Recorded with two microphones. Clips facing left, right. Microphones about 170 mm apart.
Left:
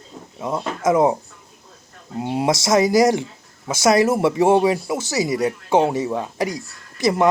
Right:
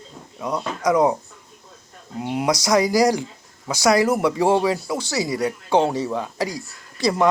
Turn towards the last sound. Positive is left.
turn(degrees=20)  # may be behind; listen again after turning